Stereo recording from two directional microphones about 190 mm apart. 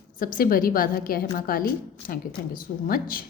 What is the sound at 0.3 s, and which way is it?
A woman's voice, 50° left (ahead or behind).